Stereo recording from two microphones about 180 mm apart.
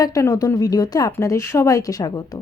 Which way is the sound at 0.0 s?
20° left (ahead or behind).